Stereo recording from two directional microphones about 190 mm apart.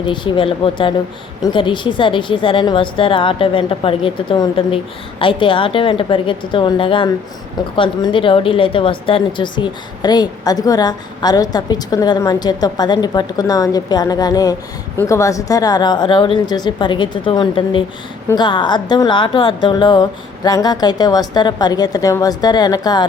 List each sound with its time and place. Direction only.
0.0 s a woman's voice: 25° left (ahead or behind)